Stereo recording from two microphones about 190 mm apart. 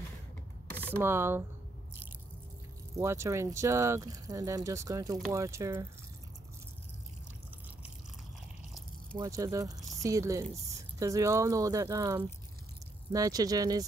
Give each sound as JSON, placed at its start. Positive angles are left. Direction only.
{"t": 0.7, "sound": "a sound", "side_deg": 10}
{"t": 0.9, "sound": "speech", "side_deg": -10}
{"t": 3.0, "sound": "speech", "side_deg": -15}
{"t": 9.2, "sound": "speech", "side_deg": -15}